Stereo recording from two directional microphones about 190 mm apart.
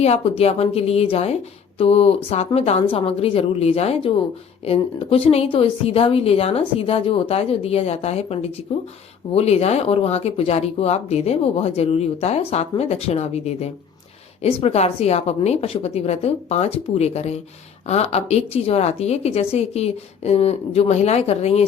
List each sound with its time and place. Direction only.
0.0 s speech: 35° left (ahead or behind)